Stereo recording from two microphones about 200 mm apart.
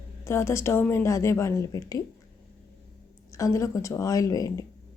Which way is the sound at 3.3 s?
15° left (ahead or behind).